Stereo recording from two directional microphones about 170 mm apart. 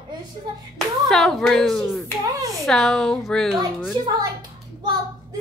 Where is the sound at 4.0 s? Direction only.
30° right (ahead or behind).